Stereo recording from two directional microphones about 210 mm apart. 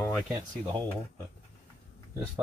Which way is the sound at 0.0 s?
Centre (ahead or behind).